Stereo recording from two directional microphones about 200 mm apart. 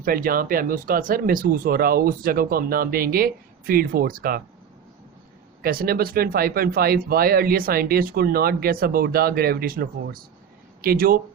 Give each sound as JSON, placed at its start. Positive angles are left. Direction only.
{"t": 0.0, "sound": "speech", "side_deg": -45}
{"t": 5.6, "sound": "speech", "side_deg": -45}